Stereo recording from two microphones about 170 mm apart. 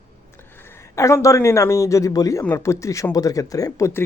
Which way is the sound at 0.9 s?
15° left (ahead or behind).